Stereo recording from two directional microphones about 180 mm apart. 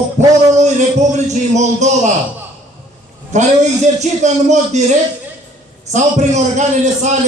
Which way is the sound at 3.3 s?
40° right (ahead or behind).